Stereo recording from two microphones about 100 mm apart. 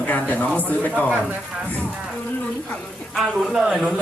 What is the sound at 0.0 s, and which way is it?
Speech, 15° left (ahead or behind).